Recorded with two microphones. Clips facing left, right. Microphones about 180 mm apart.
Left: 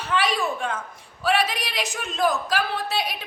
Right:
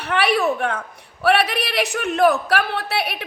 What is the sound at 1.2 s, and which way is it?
A woman's voice, 65° right (ahead or behind).